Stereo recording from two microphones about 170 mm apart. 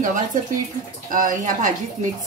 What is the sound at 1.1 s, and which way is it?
Speech, 50° right (ahead or behind).